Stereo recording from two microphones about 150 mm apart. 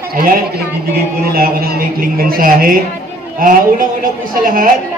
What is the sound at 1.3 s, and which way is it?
A woman's voice, 85° right.